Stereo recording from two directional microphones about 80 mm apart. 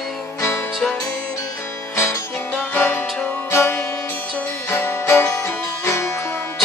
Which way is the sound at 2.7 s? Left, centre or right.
Left.